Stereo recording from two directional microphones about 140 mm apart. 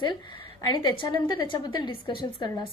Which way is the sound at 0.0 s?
35° left (ahead or behind).